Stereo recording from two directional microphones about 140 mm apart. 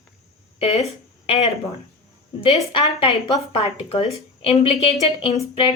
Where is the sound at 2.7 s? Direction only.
35° left (ahead or behind).